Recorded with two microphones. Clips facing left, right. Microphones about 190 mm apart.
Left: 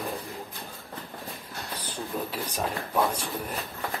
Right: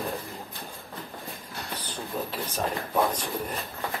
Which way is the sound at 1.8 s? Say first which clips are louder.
Left 1 dB; 10° left (ahead or behind).